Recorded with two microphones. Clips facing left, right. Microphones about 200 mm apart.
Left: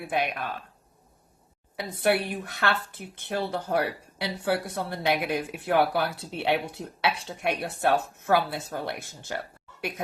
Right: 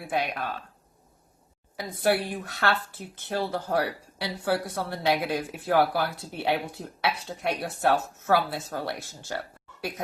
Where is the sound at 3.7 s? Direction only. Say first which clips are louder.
Even; 20° left (ahead or behind).